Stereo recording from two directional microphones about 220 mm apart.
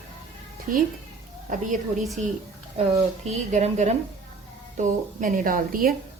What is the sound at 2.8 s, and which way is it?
A woman's voice, 30° right (ahead or behind).